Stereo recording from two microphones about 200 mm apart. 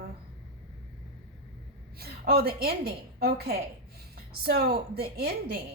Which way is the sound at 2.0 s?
50° right (ahead or behind).